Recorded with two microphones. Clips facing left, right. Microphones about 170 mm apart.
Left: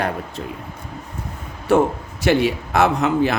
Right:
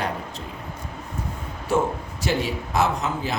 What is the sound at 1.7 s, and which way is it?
A man's voice, 60° left (ahead or behind).